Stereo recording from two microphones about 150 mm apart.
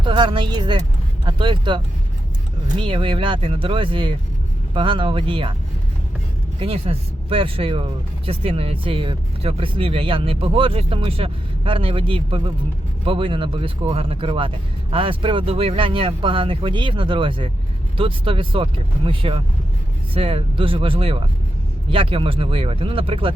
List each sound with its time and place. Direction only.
0.0 s speech: 30° right (ahead or behind)
2.8 s speech: 35° right (ahead or behind)
6.6 s speech: 40° right (ahead or behind)